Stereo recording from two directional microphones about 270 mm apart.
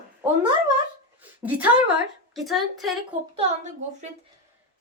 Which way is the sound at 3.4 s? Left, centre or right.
Right.